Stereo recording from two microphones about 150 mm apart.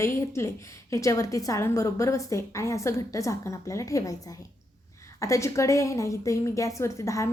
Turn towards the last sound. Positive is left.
turn(degrees=20)  # may be behind; listen again after turning